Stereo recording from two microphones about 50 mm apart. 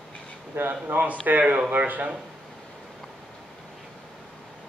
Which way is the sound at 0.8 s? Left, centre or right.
Right.